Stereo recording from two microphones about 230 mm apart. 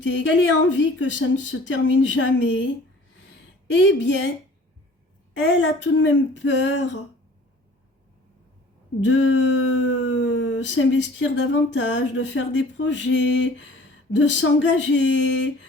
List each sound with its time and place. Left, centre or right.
0.0 s speech: left
3.8 s speech: left
5.4 s speech: left
9.0 s speech: left